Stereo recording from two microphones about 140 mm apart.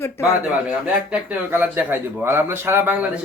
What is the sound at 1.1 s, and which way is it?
Speech, 10° right (ahead or behind).